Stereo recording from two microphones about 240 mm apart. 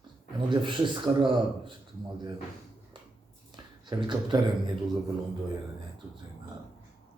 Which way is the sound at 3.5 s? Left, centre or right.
Centre.